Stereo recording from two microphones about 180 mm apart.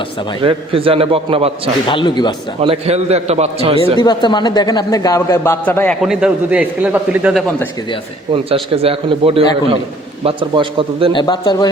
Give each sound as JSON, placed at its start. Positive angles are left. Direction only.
{"t": 0.4, "sound": "a man's voice", "side_deg": -30}
{"t": 1.9, "sound": "a man's voice", "side_deg": 25}
{"t": 2.6, "sound": "a man's voice", "side_deg": -35}
{"t": 4.0, "sound": "a man's voice", "side_deg": 25}
{"t": 6.0, "sound": "a man's voice", "side_deg": -5}
{"t": 8.3, "sound": "a man's voice", "side_deg": -30}
{"t": 11.1, "sound": "a man's voice", "side_deg": 25}